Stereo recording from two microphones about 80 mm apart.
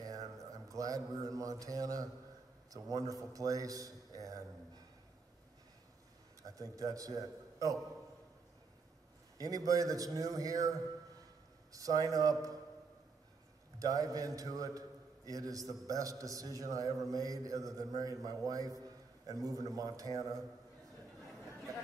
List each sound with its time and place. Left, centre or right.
0.0 s a man's voice: right
6.4 s a man's voice: right
9.4 s a man's voice: right
13.7 s a man's voice: right